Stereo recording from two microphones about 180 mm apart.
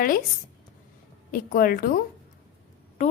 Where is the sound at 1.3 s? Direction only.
55° left (ahead or behind).